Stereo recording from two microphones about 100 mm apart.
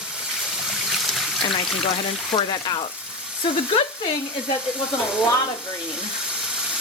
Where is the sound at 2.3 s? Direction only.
60° left (ahead or behind).